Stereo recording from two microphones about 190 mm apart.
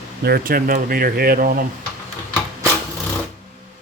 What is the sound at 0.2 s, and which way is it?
Speech, 55° right (ahead or behind).